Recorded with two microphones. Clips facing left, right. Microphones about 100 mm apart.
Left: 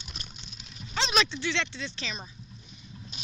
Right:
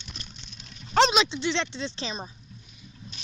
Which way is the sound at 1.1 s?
25° right (ahead or behind).